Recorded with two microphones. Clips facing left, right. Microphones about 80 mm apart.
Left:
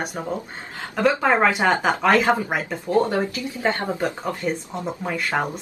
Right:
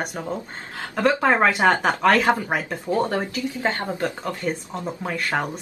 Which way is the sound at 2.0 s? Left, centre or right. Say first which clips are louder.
Even; centre.